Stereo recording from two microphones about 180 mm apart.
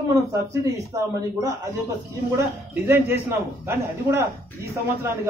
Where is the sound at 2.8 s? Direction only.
15° right (ahead or behind).